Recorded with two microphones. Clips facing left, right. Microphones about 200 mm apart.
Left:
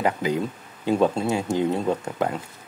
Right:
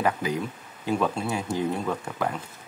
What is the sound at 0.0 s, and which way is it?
Speech, 25° left (ahead or behind).